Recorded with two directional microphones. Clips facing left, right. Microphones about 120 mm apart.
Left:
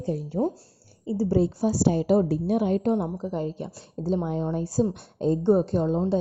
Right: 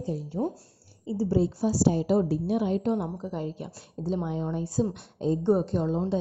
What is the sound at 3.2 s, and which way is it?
A woman's voice, 35° left (ahead or behind).